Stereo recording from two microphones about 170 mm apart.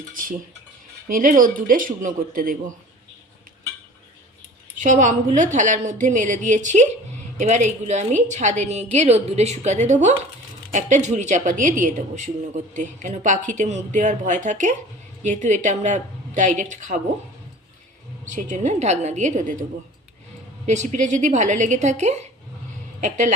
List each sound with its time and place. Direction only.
1.0 s speech: 55° right (ahead or behind)
4.8 s speech: 45° right (ahead or behind)
18.3 s speech: 45° right (ahead or behind)
20.7 s speech: 45° right (ahead or behind)